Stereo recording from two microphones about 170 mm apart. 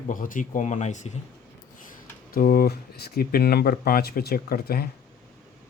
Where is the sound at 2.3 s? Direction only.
55° left (ahead or behind).